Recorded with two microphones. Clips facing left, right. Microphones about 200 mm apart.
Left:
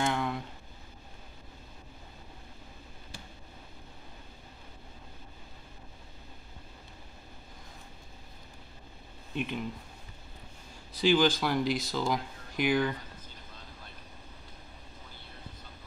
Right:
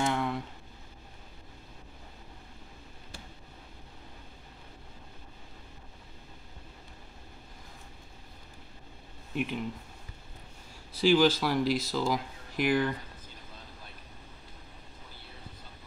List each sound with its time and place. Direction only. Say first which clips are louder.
0.0 s a sound: right 1 dB; centre (ahead or behind)
9.3 s speech: right 1 dB; 5° right (ahead or behind)
11.0 s speech: right 2 dB; 5° right (ahead or behind)